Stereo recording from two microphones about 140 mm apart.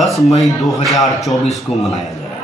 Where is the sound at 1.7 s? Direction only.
45° left (ahead or behind).